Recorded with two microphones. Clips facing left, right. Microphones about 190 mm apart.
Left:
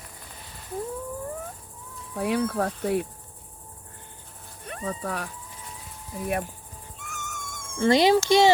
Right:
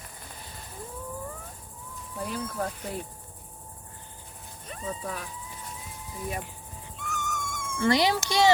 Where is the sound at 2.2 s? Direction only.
70° left (ahead or behind).